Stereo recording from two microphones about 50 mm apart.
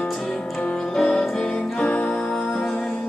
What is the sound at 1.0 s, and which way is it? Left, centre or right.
Music, centre.